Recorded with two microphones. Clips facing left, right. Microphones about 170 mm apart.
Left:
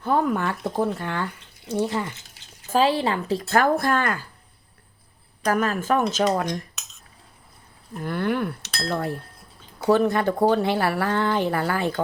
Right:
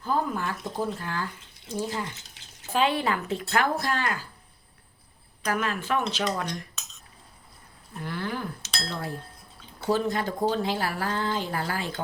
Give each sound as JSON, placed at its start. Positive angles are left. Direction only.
{"t": 0.0, "sound": "speech", "side_deg": 70}
{"t": 2.7, "sound": "speech", "side_deg": 30}
{"t": 3.5, "sound": "speech", "side_deg": 50}
{"t": 5.5, "sound": "speech", "side_deg": 45}
{"t": 8.0, "sound": "speech", "side_deg": 55}